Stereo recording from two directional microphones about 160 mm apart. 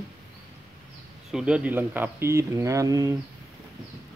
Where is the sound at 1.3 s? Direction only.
5° right (ahead or behind).